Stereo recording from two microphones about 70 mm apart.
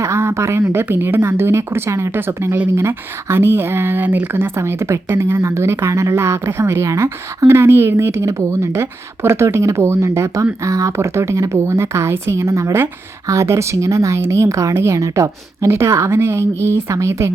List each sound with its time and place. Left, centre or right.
0.0 s speech: right